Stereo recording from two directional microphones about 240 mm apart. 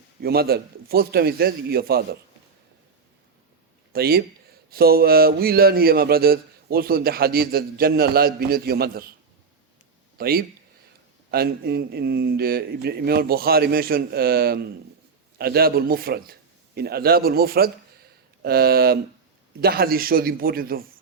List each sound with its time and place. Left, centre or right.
0.2 s a man's voice: right
3.9 s a man's voice: right
10.2 s a man's voice: right